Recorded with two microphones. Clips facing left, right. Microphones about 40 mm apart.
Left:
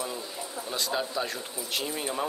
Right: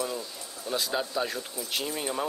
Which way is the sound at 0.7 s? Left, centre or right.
Centre.